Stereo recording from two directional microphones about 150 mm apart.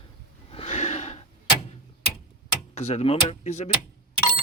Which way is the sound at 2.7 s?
45° left (ahead or behind).